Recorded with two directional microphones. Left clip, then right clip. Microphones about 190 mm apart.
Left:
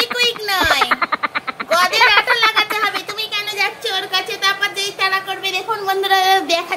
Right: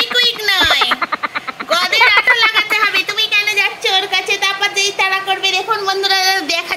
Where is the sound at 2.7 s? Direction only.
20° right (ahead or behind).